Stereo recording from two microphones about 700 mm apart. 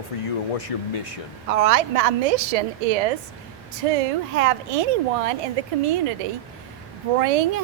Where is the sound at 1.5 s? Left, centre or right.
Right.